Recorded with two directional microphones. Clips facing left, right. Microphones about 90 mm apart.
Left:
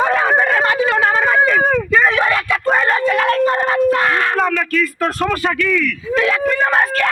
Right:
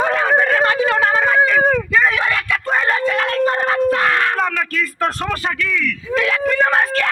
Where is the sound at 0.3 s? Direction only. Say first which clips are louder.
Even; 35° left (ahead or behind).